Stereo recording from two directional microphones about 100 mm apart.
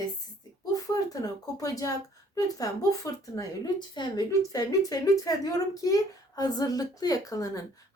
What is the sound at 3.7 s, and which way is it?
A woman's voice, 45° left (ahead or behind).